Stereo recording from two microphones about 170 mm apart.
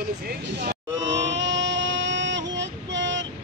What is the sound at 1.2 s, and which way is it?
Child singing, 90° right.